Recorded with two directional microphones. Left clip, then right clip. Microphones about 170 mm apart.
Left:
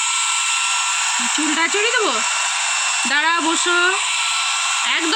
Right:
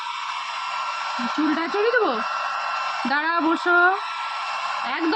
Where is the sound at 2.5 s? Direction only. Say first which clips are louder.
Left 5 dB; 15° right (ahead or behind).